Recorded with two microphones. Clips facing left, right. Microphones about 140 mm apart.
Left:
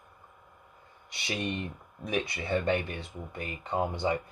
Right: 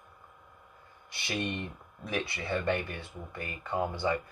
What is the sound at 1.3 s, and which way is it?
Speech, 15° left (ahead or behind).